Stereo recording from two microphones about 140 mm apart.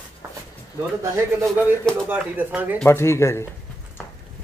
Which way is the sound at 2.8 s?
20° left (ahead or behind).